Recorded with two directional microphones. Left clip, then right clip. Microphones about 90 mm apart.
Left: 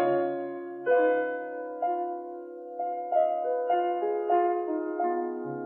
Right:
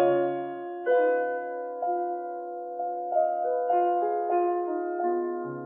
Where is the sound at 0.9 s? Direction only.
35° right (ahead or behind).